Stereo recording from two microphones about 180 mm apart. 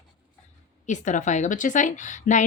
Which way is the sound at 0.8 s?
40° left (ahead or behind).